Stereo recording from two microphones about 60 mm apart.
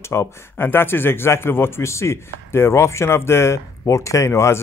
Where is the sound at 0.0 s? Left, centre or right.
Left.